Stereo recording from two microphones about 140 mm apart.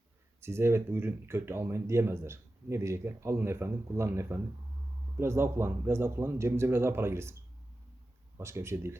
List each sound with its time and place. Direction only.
0.4 s speech: 20° right (ahead or behind)
8.4 s speech: 20° right (ahead or behind)